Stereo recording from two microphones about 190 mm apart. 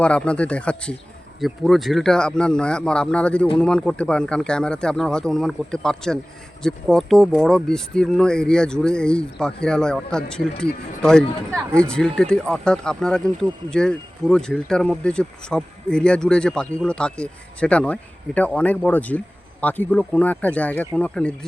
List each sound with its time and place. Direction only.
0.0 s speech: 5° left (ahead or behind)